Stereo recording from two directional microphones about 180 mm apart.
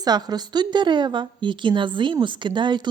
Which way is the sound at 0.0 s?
20° right (ahead or behind).